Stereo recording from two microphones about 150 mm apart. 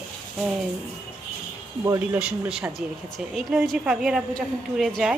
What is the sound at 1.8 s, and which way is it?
Speech, 20° right (ahead or behind).